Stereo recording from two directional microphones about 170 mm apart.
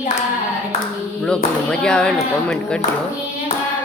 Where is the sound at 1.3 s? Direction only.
5° left (ahead or behind).